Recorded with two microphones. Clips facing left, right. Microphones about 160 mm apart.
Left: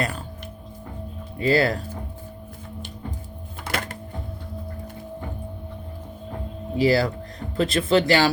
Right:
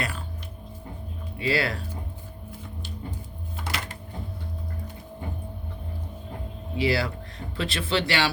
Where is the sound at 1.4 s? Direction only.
40° left (ahead or behind).